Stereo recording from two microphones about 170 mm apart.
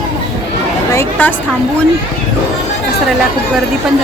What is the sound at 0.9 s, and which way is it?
Chatter, 15° left (ahead or behind).